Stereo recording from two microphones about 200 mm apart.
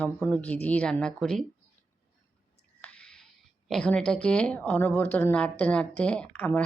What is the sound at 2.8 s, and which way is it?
Whispering, 5° left (ahead or behind).